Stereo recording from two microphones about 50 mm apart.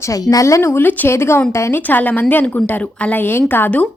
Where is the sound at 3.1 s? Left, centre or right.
Left.